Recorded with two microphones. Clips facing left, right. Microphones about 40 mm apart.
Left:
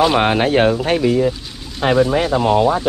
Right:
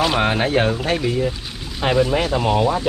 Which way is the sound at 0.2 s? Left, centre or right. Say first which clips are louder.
Left 4 dB; left.